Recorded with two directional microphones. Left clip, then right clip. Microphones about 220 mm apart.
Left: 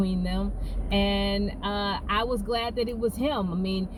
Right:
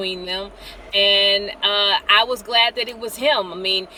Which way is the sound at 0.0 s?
15° right (ahead or behind).